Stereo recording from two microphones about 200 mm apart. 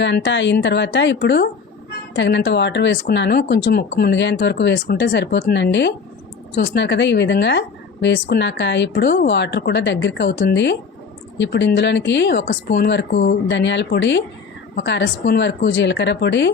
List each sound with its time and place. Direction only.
0.0 s speech: 60° left (ahead or behind)
12.5 s speech: 50° left (ahead or behind)
13.1 s speech: 40° left (ahead or behind)
13.5 s speech: 65° left (ahead or behind)